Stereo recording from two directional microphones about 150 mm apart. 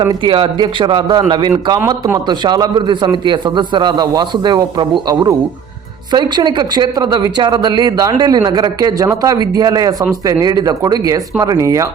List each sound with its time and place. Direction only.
0.0 s a man's voice: 35° right (ahead or behind)